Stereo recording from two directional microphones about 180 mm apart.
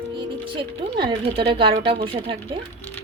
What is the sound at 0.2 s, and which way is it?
Speech, 25° right (ahead or behind).